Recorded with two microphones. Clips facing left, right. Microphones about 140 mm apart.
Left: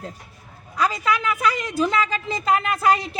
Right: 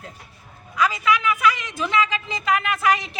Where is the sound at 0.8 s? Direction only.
40° left (ahead or behind).